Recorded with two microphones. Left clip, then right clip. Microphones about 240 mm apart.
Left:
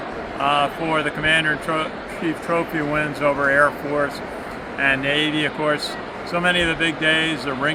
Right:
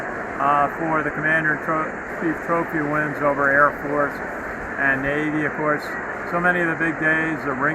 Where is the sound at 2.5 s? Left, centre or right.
Left.